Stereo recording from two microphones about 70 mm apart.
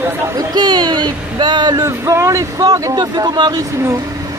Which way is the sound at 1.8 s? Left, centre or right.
Right.